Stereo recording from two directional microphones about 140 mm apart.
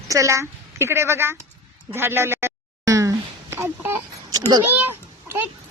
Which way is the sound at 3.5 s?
15° right (ahead or behind).